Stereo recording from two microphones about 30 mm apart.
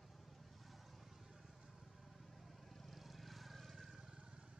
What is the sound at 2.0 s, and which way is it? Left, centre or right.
Vehicle, centre.